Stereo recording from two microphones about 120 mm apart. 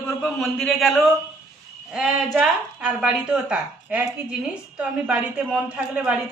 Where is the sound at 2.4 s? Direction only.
5° right (ahead or behind).